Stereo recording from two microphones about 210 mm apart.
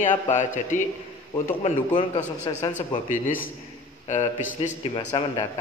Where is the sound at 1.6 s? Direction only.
30° left (ahead or behind).